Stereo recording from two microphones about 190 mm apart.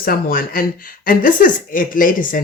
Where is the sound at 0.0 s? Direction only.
50° left (ahead or behind).